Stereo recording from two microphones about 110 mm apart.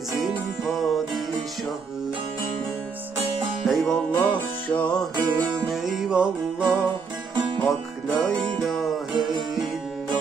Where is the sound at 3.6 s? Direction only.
Centre (ahead or behind).